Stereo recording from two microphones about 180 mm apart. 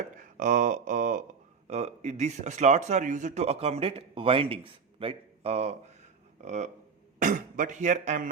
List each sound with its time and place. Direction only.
0.2 s speech: 45° right (ahead or behind)